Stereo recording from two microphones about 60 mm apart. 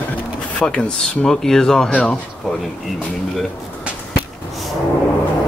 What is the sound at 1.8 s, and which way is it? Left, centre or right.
Speech, left.